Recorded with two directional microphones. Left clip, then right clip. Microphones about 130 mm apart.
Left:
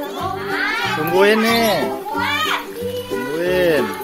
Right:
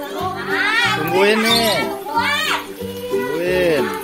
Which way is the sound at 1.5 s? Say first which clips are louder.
Even; 15° left (ahead or behind).